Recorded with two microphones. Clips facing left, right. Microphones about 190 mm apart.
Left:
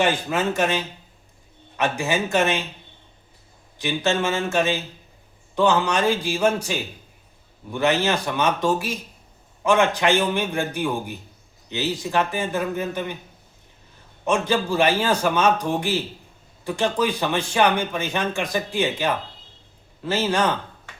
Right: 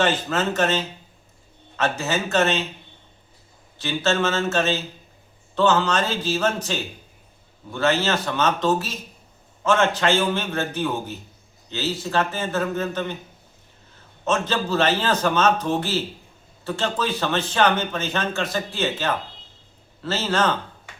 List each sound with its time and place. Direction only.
0.0 s a man's voice: 15° left (ahead or behind)
3.8 s a man's voice: 15° left (ahead or behind)
14.3 s a man's voice: 15° left (ahead or behind)